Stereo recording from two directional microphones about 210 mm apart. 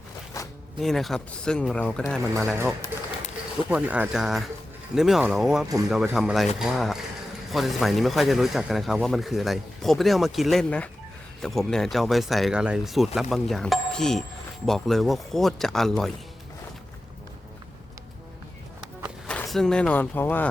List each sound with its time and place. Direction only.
0.4 s zipper: 15° left (ahead or behind)
0.8 s speech: centre (ahead or behind)
3.7 s speech: 5° right (ahead or behind)
19.3 s speech: 5° left (ahead or behind)